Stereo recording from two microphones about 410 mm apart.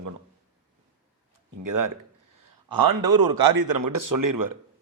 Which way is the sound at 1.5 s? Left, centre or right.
Right.